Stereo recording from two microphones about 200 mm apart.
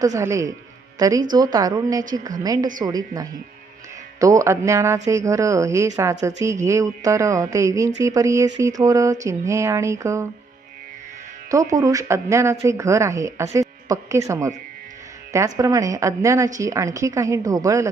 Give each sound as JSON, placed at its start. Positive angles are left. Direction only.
{"t": 0.0, "sound": "a woman's voice", "side_deg": -15}
{"t": 11.7, "sound": "speech", "side_deg": -15}